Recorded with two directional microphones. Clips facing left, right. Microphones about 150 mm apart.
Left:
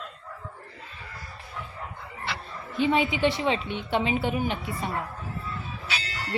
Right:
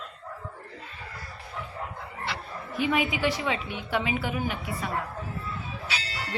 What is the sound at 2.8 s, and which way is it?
A woman's voice, 30° left (ahead or behind).